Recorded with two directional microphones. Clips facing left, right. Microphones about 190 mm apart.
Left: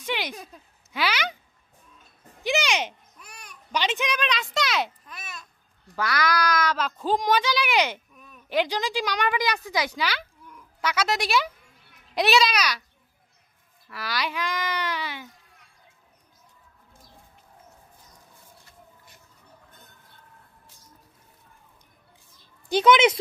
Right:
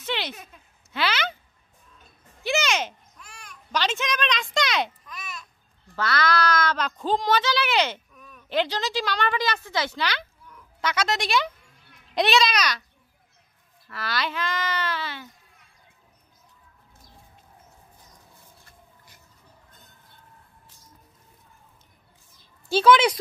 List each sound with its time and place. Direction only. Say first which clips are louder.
0.0 s a sound: even; 10° left (ahead or behind)
0.9 s speech: even; 10° left (ahead or behind)
2.4 s a sound: even; 15° left (ahead or behind)
3.7 s speech: even; 15° left (ahead or behind)
5.9 s a child's voice: right 1 dB; 10° left (ahead or behind)
13.8 s speech: right 1 dB; 10° left (ahead or behind)
22.7 s speech: even; 20° left (ahead or behind)